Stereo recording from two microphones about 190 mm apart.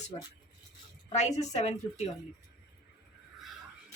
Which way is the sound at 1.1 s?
35° left (ahead or behind).